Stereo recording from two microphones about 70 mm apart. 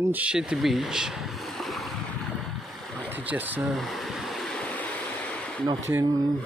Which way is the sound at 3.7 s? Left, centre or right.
Centre.